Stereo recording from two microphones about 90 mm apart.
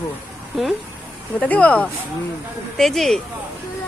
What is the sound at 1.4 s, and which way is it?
Speech, 15° left (ahead or behind).